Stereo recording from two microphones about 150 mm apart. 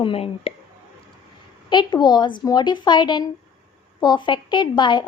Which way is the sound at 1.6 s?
30° left (ahead or behind).